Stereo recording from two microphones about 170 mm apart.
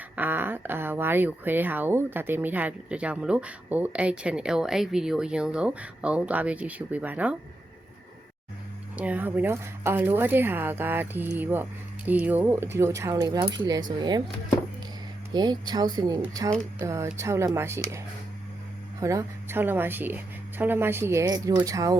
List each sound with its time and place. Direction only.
0.2 s speech: 10° right (ahead or behind)
9.0 s speech: 10° right (ahead or behind)
15.3 s speech: 25° right (ahead or behind)